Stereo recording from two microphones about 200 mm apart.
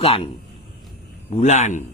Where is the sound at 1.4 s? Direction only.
35° left (ahead or behind).